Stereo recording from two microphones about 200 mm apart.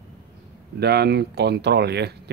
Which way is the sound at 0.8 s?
55° right (ahead or behind).